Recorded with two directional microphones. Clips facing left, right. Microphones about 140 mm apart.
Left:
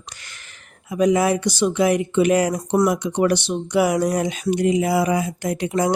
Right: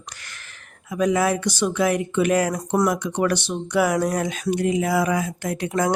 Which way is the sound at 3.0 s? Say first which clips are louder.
Left 3 dB; 5° left (ahead or behind).